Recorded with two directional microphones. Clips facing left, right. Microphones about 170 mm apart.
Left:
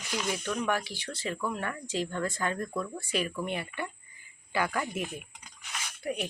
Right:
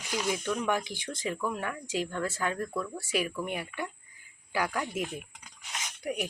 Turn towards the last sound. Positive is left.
turn(degrees=-5)  # may be behind; listen again after turning